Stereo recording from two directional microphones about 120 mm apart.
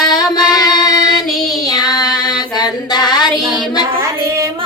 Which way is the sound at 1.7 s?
35° left (ahead or behind).